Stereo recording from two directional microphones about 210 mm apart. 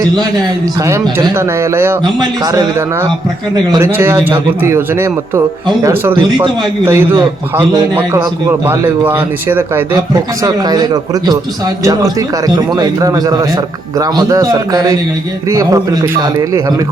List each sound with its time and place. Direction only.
0.9 s speech: 15° right (ahead or behind)
6.1 s speech: 20° right (ahead or behind)
8.6 s speech: 10° right (ahead or behind)